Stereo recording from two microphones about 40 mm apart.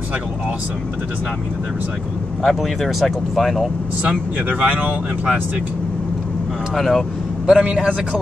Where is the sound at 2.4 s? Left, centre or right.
Centre.